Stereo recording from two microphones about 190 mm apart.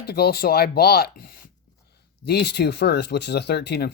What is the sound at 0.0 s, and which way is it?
Speech, 55° left (ahead or behind).